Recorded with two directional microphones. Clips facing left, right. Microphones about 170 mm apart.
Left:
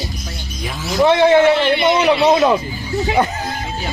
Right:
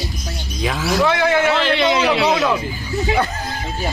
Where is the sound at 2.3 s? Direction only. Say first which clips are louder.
Left 5 dB; 25° left (ahead or behind).